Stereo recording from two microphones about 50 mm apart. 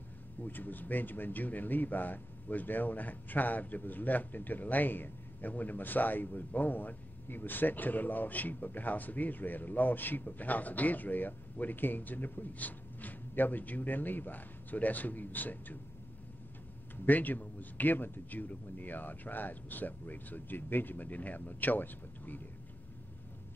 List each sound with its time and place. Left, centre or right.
0.4 s speech: left
16.9 s speech: left